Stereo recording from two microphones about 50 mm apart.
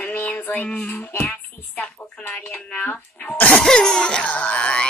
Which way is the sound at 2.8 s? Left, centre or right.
Left.